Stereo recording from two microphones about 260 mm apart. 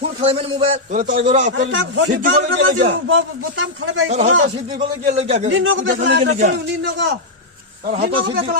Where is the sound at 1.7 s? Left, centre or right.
Right.